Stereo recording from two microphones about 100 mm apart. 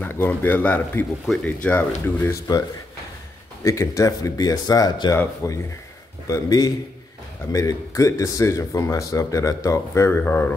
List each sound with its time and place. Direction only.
0.0 s speech: 15° left (ahead or behind)
3.6 s speech: 30° left (ahead or behind)
5.1 s speech: 30° left (ahead or behind)